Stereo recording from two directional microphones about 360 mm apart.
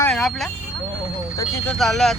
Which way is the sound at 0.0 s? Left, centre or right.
Centre.